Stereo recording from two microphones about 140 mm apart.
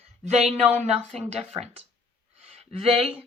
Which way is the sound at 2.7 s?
45° right (ahead or behind).